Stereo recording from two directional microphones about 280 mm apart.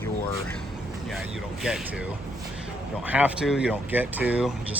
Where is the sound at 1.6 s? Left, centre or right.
Centre.